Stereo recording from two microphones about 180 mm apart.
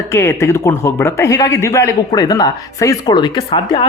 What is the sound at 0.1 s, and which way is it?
A man's voice, 15° left (ahead or behind).